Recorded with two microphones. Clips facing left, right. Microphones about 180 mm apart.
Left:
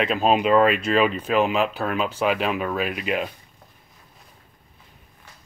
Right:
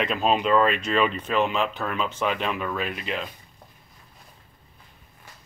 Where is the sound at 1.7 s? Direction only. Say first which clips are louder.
Left 4 dB; 35° left (ahead or behind).